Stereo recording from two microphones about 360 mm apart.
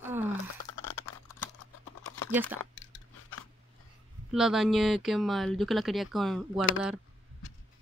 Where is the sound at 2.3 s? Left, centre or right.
Centre.